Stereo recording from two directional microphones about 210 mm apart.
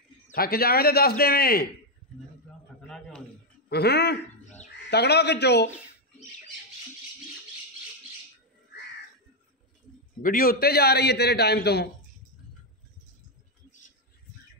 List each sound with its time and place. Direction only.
0.3 s a man's voice: 45° left (ahead or behind)
3.6 s a man's voice: 50° left (ahead or behind)
10.2 s a man's voice: 45° left (ahead or behind)